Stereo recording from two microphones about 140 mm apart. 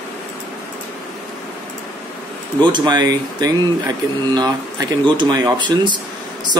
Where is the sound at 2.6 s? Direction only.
30° right (ahead or behind).